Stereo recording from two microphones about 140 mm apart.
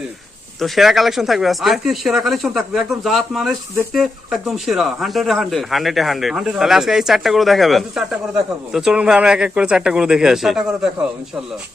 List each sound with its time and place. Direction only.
0.6 s speech: centre (ahead or behind)